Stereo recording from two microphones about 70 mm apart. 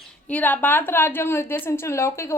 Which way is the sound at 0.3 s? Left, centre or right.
Left.